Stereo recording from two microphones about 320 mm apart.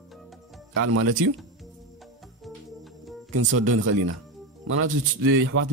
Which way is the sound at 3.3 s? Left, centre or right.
Right.